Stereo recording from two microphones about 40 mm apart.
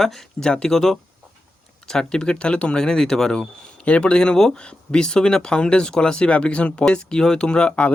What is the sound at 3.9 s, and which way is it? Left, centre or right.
Speech, left.